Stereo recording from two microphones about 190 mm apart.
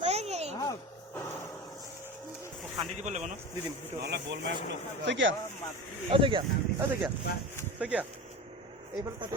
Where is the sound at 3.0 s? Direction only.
40° right (ahead or behind).